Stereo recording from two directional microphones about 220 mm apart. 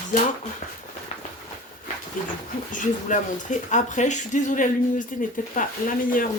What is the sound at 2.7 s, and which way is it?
Speech, 35° left (ahead or behind).